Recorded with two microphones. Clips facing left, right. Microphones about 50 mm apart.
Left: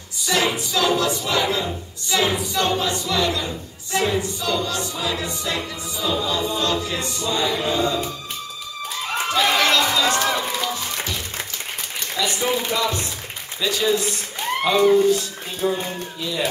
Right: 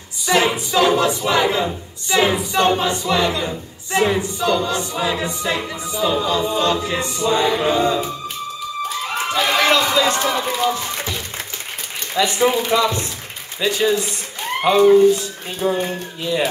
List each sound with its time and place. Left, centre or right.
0.3 s a sound: right
2.0 s speech: right
8.8 s run: centre
9.6 s run: right
10.7 s music: centre
12.2 s speech: right
13.6 s speech: right
13.8 s a child's voice: centre
16.2 s speech: right